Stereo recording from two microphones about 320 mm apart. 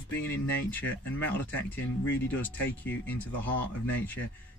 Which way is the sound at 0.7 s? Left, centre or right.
Centre.